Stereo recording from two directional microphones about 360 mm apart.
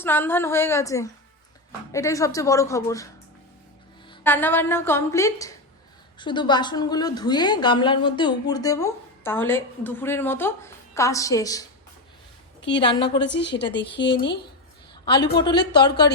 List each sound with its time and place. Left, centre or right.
0.0 s a woman's voice: centre
4.1 s a woman's voice: centre
12.8 s a woman's voice: centre
13.1 s speech: left
15.0 s a woman's voice: centre